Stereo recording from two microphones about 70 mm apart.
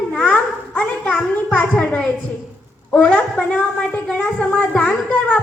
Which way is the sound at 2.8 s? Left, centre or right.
Left.